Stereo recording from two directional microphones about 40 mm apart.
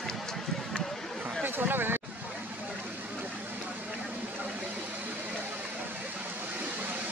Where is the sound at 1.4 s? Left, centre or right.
Right.